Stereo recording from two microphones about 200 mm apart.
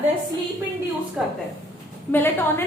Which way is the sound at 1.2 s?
5° right (ahead or behind).